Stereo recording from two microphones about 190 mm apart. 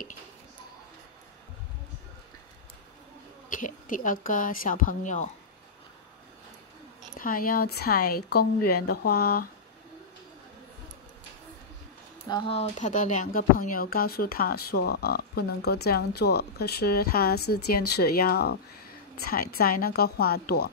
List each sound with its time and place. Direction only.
3.4 s speech: 45° left (ahead or behind)
7.2 s speech: 50° left (ahead or behind)
12.3 s speech: 25° left (ahead or behind); by 20.7 s 55° left (ahead or behind)